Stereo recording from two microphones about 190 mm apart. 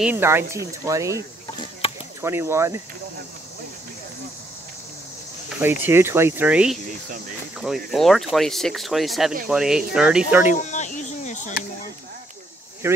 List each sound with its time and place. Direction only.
0.0 s speech: 10° right (ahead or behind)
1.8 s chop: 30° left (ahead or behind)
2.2 s speech: 15° right (ahead or behind)
5.9 s speech: 10° right (ahead or behind)
10.5 s a sound: 40° left (ahead or behind)
12.8 s speech: 10° right (ahead or behind)